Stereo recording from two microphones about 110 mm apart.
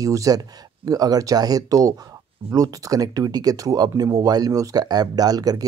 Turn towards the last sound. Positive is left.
turn(degrees=-35)  # may be behind; listen again after turning